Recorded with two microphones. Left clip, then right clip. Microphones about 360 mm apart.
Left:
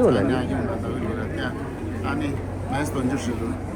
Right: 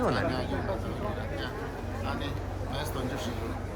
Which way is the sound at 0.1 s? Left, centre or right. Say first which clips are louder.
Left 8 dB; right.